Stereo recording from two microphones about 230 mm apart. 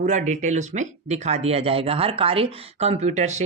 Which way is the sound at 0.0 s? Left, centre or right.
Right.